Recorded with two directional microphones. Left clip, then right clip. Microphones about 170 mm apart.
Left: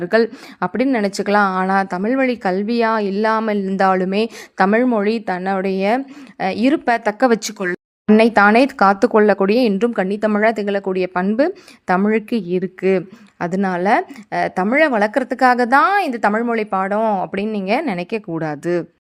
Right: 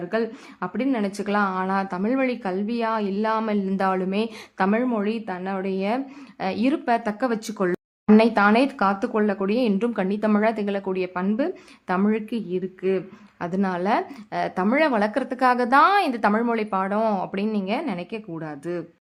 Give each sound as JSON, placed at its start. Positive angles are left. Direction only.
{"t": 0.1, "sound": "a woman's voice", "side_deg": 45}
{"t": 8.0, "sound": "a woman's voice", "side_deg": 35}
{"t": 17.3, "sound": "a woman's voice", "side_deg": 35}